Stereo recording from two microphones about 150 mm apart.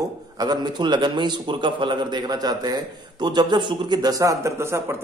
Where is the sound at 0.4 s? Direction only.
25° right (ahead or behind).